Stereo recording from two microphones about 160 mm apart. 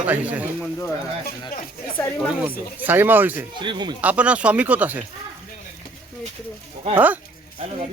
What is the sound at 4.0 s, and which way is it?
A man's voice, 10° right (ahead or behind).